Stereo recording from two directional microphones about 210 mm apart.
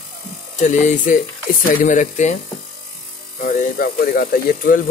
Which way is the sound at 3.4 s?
40° left (ahead or behind).